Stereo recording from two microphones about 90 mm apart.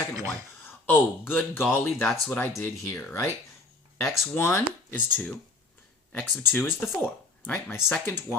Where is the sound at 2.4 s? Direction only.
20° left (ahead or behind).